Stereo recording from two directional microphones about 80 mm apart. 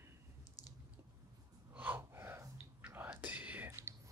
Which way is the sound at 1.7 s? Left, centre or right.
Right.